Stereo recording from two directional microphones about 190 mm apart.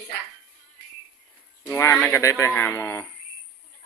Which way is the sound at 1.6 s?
15° left (ahead or behind).